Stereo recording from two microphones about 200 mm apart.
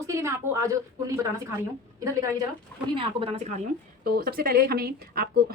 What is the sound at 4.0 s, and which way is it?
Speech, 50° right (ahead or behind).